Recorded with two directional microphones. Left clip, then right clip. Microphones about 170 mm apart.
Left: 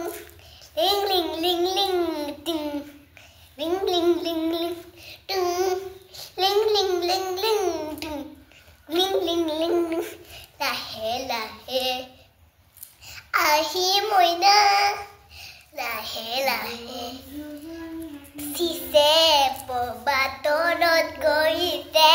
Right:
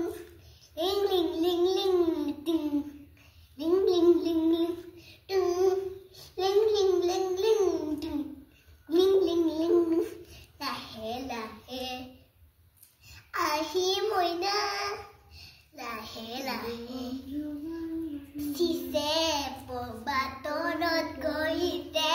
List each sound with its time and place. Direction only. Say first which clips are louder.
0.7 s child singing: left 6 dB; 20° right (ahead or behind)
6.3 s babbling: left 4 dB; 20° right (ahead or behind)
10.6 s child singing: left 9 dB; 20° right (ahead or behind)
13.0 s child singing: left 9 dB; 20° right (ahead or behind)
18.5 s child singing: left 8 dB; 25° right (ahead or behind)